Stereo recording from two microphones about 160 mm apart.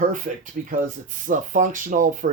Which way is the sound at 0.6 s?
55° right (ahead or behind).